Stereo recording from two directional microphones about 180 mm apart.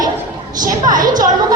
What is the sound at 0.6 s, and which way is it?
Music, 50° right (ahead or behind).